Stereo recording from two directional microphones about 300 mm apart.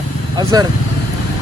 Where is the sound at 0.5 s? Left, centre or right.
Centre.